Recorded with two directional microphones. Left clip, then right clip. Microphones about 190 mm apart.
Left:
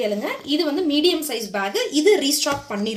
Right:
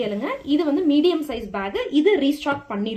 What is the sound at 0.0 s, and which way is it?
A woman's voice, 35° right (ahead or behind).